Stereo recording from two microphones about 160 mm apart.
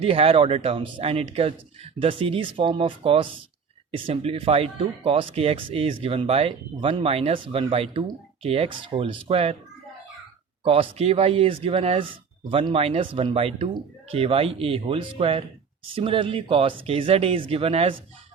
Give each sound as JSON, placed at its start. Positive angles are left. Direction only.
{"t": 0.0, "sound": "speech", "side_deg": -35}
{"t": 10.6, "sound": "speech", "side_deg": -35}